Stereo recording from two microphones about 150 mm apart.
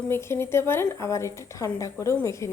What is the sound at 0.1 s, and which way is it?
A woman's voice, 15° left (ahead or behind).